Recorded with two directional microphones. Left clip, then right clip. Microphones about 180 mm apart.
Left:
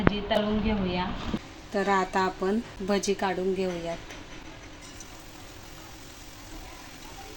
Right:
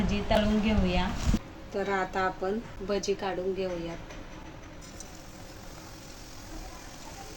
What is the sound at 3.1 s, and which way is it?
Speech, 55° left (ahead or behind).